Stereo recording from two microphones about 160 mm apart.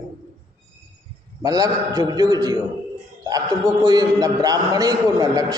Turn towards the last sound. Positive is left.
turn(degrees=-25)  # may be behind; listen again after turning